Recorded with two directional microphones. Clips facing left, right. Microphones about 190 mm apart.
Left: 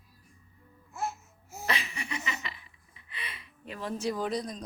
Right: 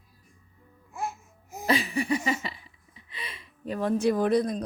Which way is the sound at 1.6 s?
35° right (ahead or behind).